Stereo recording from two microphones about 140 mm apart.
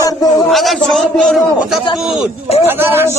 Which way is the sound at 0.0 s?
25° left (ahead or behind).